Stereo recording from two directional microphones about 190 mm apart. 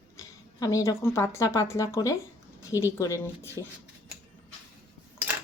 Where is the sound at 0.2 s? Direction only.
15° left (ahead or behind).